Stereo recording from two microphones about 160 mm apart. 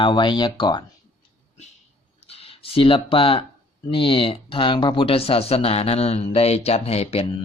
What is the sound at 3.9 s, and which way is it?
Speech, 35° left (ahead or behind).